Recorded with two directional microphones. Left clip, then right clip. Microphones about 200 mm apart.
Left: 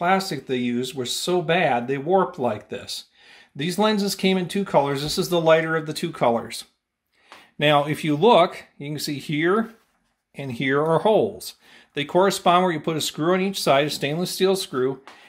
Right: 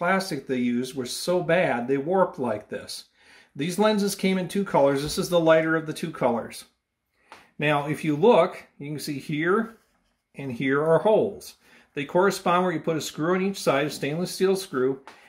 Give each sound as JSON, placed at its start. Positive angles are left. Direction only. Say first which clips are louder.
{"t": 0.0, "sound": "speech", "louder": "left 3 dB", "side_deg": 45}